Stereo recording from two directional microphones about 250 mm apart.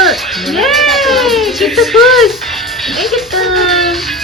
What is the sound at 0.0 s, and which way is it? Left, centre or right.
Music, centre.